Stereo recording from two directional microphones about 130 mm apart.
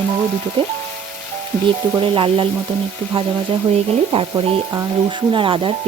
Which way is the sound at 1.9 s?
40° right (ahead or behind).